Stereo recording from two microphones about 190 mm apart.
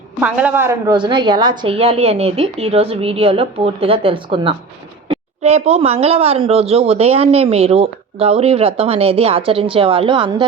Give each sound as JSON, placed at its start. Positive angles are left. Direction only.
{"t": 0.2, "sound": "a woman's voice", "side_deg": -5}